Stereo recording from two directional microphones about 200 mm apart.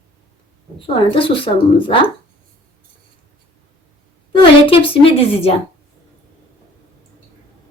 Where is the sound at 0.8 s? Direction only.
25° left (ahead or behind).